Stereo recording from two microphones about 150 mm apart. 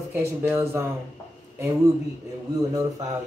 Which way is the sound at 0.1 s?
15° right (ahead or behind).